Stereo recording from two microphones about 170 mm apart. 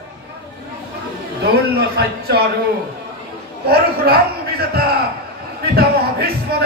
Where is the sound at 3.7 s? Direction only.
65° right (ahead or behind).